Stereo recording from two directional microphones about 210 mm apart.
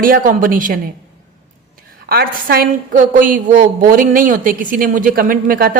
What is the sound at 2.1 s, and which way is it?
A woman's voice, 45° right (ahead or behind).